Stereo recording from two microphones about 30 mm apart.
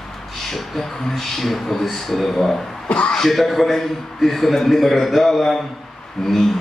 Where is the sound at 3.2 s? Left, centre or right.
Centre.